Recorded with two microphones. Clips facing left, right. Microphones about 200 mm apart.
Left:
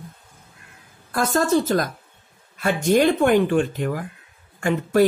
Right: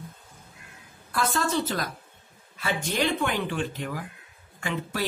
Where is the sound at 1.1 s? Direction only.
45° left (ahead or behind).